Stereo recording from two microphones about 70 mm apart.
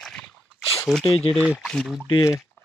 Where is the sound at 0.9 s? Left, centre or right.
Centre.